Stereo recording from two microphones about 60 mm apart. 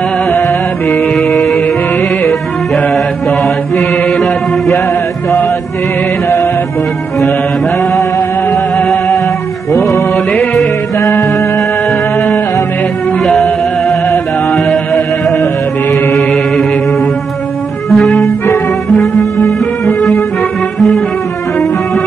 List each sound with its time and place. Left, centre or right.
1.3 s music: left
13.3 s music: centre
17.8 s music: centre